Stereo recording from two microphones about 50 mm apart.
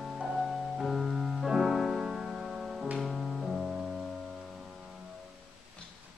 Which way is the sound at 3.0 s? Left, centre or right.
Centre.